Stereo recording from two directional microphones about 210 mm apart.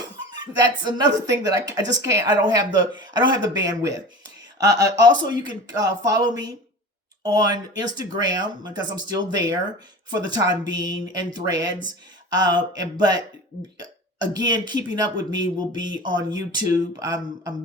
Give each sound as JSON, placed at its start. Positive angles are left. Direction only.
{"t": 0.9, "sound": "speech", "side_deg": -20}